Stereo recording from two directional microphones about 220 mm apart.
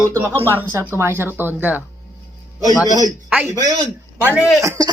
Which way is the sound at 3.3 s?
5° right (ahead or behind).